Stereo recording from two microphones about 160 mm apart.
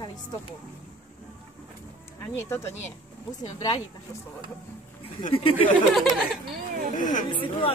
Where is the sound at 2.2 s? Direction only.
15° left (ahead or behind).